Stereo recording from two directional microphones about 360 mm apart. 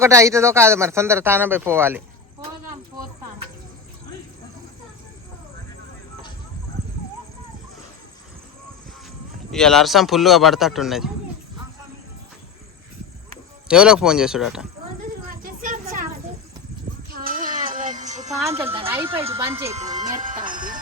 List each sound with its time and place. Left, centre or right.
0.0 s speech: centre
9.5 s speech: centre
13.7 s speech: centre
15.3 s a sound: right
17.2 s music: right
18.3 s speech: centre
20.4 s speech: right